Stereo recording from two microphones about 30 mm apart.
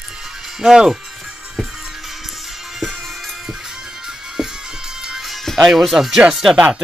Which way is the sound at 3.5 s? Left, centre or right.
Centre.